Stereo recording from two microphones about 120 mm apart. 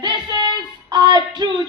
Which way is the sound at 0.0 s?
35° right (ahead or behind).